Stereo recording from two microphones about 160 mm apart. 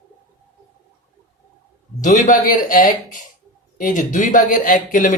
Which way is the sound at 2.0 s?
50° left (ahead or behind).